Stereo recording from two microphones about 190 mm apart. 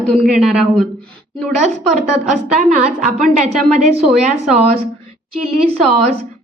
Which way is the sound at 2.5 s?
40° right (ahead or behind).